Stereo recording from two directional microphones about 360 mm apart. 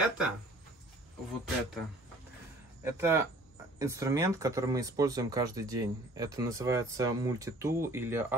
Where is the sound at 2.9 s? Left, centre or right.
Centre.